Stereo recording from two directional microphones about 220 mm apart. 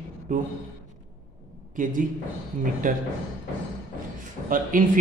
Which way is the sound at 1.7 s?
35° right (ahead or behind).